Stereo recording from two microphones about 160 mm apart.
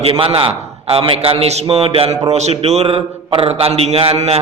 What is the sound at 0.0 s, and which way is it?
A man's voice, 35° right (ahead or behind).